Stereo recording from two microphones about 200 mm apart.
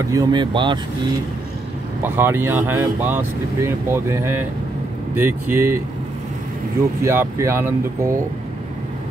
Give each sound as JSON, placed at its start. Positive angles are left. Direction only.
{"t": 0.1, "sound": "speech", "side_deg": -20}
{"t": 2.0, "sound": "speech", "side_deg": -10}
{"t": 7.0, "sound": "speech", "side_deg": -15}